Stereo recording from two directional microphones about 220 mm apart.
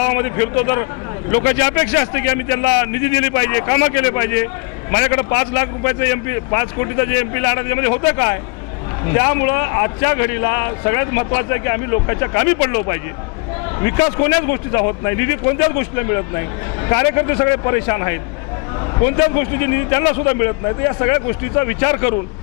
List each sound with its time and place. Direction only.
0.1 s a man's voice: 15° left (ahead or behind)